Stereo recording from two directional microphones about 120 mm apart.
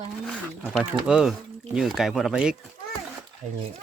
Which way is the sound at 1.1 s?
5° right (ahead or behind).